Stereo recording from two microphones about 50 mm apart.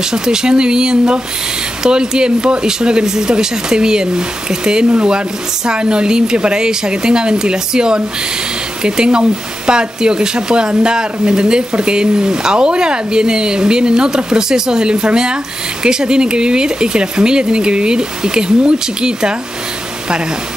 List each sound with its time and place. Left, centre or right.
0.0 s speech: centre